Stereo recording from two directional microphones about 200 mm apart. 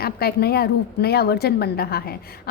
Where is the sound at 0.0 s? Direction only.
50° left (ahead or behind).